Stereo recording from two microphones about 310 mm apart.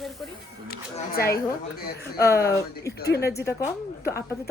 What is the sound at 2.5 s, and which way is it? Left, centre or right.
Speech, centre.